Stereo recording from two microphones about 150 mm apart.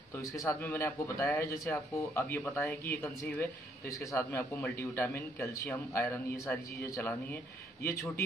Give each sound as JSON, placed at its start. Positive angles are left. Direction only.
{"t": 0.2, "sound": "a man's voice", "side_deg": 20}